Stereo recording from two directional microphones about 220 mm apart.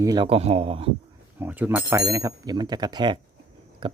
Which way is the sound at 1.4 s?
10° right (ahead or behind).